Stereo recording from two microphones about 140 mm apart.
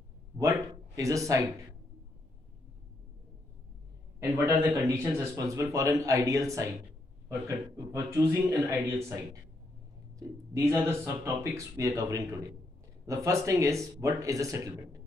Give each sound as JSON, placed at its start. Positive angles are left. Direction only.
{"t": 0.4, "sound": "speech", "side_deg": -20}
{"t": 4.2, "sound": "speech", "side_deg": -20}